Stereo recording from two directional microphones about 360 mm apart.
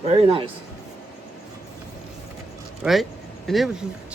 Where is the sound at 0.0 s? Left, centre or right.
Centre.